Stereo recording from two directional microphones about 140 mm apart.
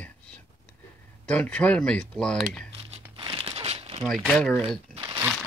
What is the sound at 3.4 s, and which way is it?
Crumpling, 40° right (ahead or behind).